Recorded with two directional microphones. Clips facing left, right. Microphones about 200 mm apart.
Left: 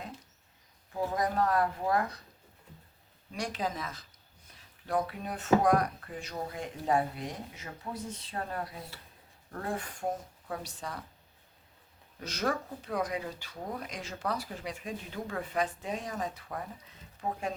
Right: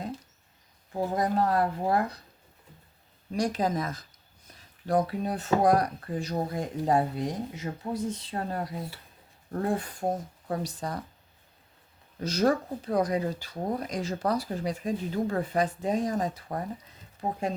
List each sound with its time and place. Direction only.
0.9 s speech: 30° right (ahead or behind)
3.3 s speech: 40° right (ahead or behind)
12.2 s speech: 35° right (ahead or behind)